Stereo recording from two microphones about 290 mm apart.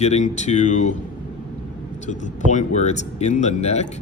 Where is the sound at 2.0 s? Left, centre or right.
Left.